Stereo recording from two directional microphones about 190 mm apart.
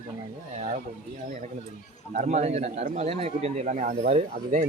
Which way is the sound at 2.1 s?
40° right (ahead or behind).